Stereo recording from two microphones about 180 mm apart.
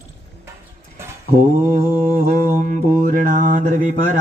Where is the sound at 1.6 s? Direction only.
45° right (ahead or behind).